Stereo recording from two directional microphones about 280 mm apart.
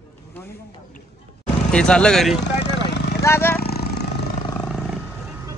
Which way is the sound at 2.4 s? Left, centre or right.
Left.